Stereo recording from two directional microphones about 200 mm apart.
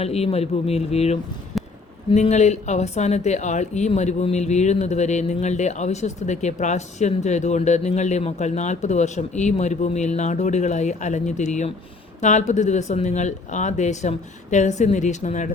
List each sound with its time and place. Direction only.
0.0 s speech: 30° left (ahead or behind)
1.5 s a sound: centre (ahead or behind)
2.0 s speech: 30° left (ahead or behind)